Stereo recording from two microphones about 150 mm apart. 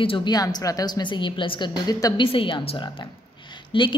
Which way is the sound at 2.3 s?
35° left (ahead or behind).